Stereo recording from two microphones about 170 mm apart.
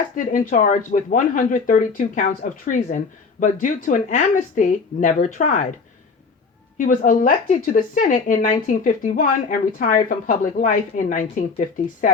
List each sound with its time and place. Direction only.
0.3 s speech: 50° left (ahead or behind)
6.7 s speech: 50° left (ahead or behind)